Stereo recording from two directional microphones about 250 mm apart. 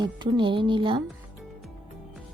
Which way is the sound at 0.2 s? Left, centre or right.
Centre.